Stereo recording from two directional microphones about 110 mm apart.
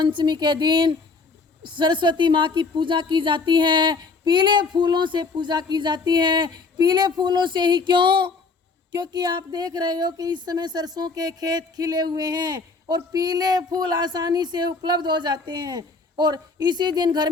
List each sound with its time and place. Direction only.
0.0 s a woman's voice: 45° right (ahead or behind)